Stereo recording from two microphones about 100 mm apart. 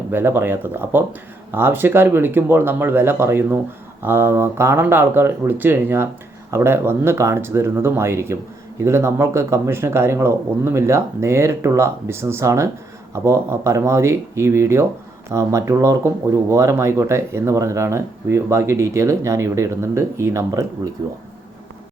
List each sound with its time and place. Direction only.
0.1 s speech: 20° right (ahead or behind)